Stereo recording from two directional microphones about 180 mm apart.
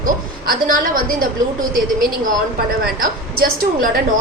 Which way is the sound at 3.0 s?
50° right (ahead or behind).